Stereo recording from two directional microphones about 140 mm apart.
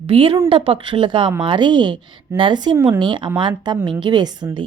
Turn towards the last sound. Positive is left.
turn(degrees=-30)  # may be behind; listen again after turning